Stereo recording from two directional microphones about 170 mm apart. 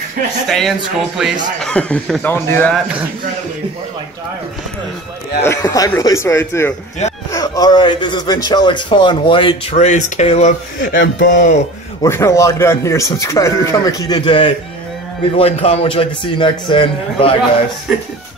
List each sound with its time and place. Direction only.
0.5 s a man's voice: centre (ahead or behind)
5.4 s a man's voice: 20° left (ahead or behind); by 10.5 s 40° left (ahead or behind)
10.8 s music: 55° left (ahead or behind)
12.0 s a man's voice: 15° left (ahead or behind)